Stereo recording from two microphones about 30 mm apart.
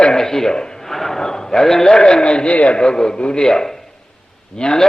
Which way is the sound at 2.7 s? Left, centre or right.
Left.